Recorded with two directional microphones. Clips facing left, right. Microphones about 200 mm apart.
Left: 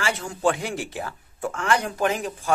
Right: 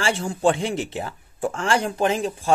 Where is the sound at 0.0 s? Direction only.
30° right (ahead or behind).